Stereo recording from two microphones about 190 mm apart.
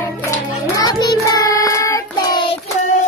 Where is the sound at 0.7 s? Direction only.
20° left (ahead or behind).